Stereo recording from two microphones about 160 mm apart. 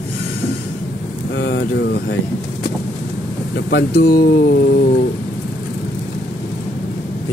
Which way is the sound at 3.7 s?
85° left.